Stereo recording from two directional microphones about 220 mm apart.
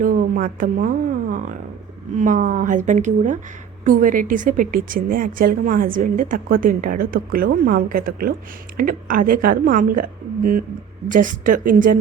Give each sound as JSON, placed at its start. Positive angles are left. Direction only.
{"t": 0.0, "sound": "a woman's voice", "side_deg": -40}